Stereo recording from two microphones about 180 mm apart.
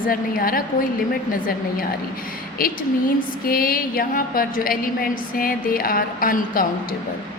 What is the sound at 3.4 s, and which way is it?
A woman's voice, 55° left (ahead or behind).